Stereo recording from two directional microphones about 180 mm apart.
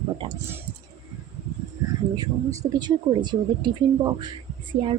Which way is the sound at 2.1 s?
20° right (ahead or behind).